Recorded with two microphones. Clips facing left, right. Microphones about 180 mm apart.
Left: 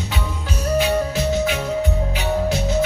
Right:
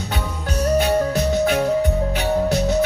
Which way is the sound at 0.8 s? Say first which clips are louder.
Right 1 dB; 55° right (ahead or behind).